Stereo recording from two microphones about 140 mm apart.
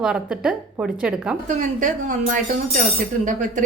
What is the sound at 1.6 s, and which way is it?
A woman's voice, 65° right (ahead or behind).